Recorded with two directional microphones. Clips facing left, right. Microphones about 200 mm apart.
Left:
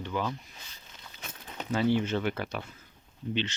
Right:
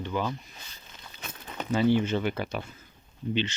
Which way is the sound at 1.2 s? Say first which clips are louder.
Right 4 dB; 70° right (ahead or behind).